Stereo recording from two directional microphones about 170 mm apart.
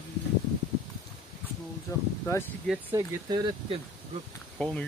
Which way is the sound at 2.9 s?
25° right (ahead or behind).